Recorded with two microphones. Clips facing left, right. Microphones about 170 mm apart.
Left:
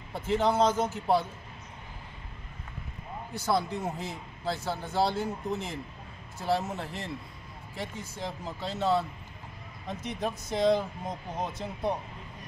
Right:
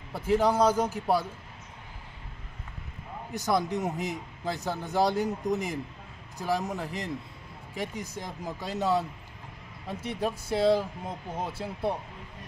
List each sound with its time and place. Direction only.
0.1 s speech: 10° right (ahead or behind)
3.3 s speech: 15° right (ahead or behind)
10.0 s speech: 5° right (ahead or behind)